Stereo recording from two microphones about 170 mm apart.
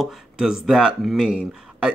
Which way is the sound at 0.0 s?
5° right (ahead or behind).